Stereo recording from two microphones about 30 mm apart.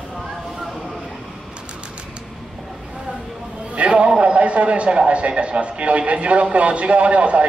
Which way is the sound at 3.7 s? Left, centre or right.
Right.